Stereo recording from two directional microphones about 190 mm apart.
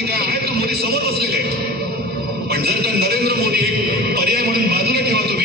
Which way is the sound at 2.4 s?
55° right (ahead or behind).